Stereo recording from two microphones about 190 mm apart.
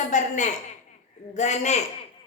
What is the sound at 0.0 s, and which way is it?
A woman's voice, 40° left (ahead or behind).